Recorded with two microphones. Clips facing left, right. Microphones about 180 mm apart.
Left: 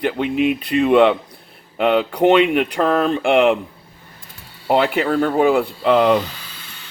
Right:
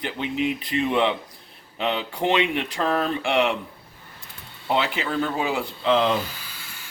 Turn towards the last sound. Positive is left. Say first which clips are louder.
# left 6 dB
turn(degrees=55)  # may be behind; listen again after turning